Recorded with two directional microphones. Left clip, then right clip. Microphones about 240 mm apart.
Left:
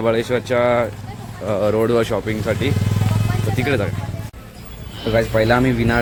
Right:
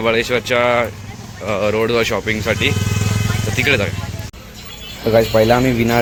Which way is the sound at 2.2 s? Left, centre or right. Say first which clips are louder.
Right 3 dB; centre.